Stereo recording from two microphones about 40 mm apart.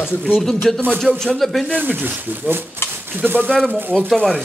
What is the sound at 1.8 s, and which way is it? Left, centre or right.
Speech, right.